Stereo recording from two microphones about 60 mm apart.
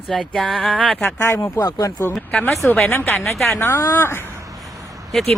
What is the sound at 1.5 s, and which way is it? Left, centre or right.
Speech, left.